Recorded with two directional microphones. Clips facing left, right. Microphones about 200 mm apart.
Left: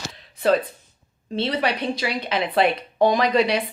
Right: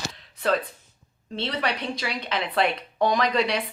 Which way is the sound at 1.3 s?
10° left (ahead or behind).